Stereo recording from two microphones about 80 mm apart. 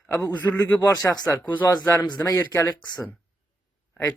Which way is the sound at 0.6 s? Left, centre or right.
Left.